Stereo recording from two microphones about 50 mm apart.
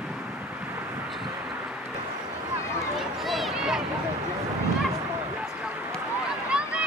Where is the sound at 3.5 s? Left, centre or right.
Centre.